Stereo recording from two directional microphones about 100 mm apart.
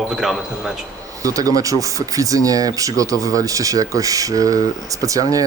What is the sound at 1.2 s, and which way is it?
Speech, 35° right (ahead or behind).